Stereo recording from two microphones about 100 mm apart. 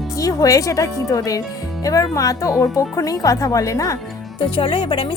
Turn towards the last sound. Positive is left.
turn(degrees=60)  # may be behind; listen again after turning